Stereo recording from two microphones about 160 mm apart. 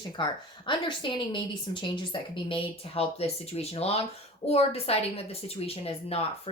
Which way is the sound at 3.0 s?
40° left (ahead or behind).